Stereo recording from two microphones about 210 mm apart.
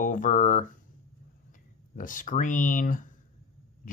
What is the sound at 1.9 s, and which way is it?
Speech, 40° left (ahead or behind).